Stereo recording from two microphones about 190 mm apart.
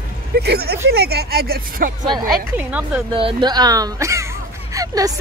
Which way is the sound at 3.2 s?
25° right (ahead or behind).